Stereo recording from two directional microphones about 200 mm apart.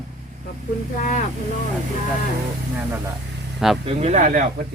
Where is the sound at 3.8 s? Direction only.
35° right (ahead or behind).